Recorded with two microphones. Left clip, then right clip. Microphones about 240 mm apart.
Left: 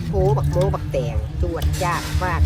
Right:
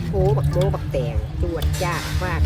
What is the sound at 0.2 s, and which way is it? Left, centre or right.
Speech, left.